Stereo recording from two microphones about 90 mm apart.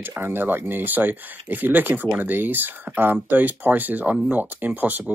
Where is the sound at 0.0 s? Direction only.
25° right (ahead or behind).